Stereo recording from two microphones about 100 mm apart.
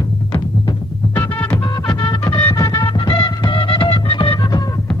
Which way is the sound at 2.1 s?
40° left (ahead or behind).